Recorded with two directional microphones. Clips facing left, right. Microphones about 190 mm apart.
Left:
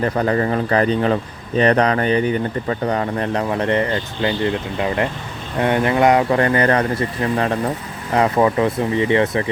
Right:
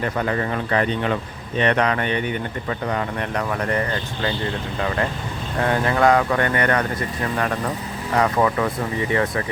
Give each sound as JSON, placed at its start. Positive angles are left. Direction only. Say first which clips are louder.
{"t": 0.0, "sound": "speech", "louder": "left 5 dB", "side_deg": 35}
{"t": 5.5, "sound": "speech", "louder": "left 4 dB", "side_deg": 20}
{"t": 8.1, "sound": "speech", "louder": "left 3 dB", "side_deg": 25}